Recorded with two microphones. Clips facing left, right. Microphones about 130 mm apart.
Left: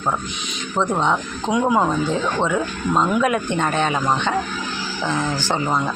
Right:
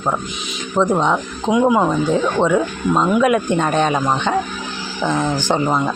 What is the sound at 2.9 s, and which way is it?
Speech, 10° right (ahead or behind).